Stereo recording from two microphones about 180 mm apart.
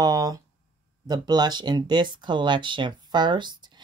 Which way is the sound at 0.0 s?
20° right (ahead or behind).